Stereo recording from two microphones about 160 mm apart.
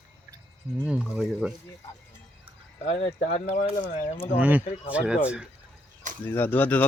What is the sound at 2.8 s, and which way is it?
Speech, 40° left (ahead or behind).